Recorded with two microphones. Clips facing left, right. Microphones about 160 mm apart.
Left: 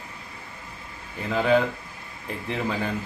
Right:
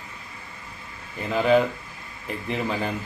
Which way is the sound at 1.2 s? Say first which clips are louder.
Right 2 dB; 15° right (ahead or behind).